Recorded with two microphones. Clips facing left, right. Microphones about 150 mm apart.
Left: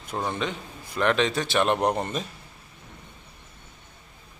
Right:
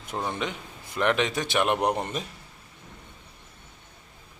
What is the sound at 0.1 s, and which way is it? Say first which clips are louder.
Speech: left 2 dB; 10° right (ahead or behind).